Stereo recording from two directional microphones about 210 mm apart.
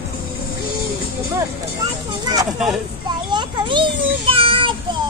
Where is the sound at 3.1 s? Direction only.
20° right (ahead or behind).